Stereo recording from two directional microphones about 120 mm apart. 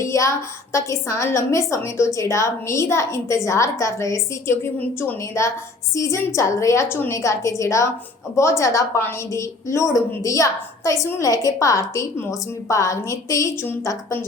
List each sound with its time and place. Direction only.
0.0 s a woman's voice: 25° left (ahead or behind)